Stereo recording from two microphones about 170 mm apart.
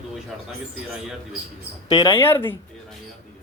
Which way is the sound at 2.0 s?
20° left (ahead or behind).